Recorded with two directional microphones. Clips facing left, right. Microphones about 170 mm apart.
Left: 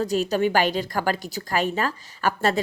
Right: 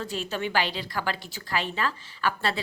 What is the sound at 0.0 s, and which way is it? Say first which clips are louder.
A woman's voice: left 9 dB; 40° left (ahead or behind).